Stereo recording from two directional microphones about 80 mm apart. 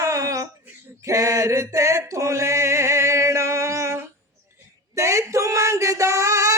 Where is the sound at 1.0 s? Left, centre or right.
Right.